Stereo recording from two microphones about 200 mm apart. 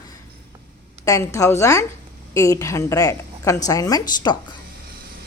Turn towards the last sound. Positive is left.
turn(degrees=20)  # may be behind; listen again after turning